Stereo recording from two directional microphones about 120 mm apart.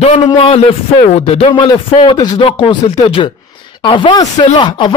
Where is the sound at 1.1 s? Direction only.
60° left (ahead or behind).